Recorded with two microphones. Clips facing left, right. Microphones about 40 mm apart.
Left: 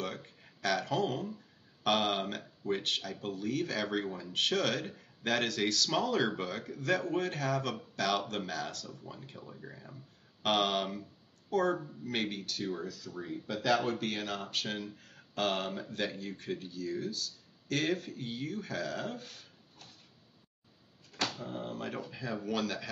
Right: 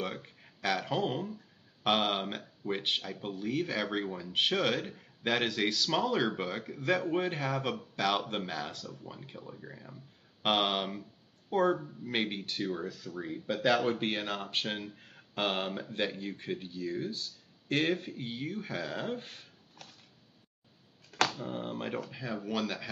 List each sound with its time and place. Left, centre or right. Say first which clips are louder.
0.0 s speech: right 2 dB; centre
9.4 s speech: right 1 dB; centre
10.4 s speech: right 1 dB; centre
21.4 s speech: right 2 dB; right
22.1 s speech: even; centre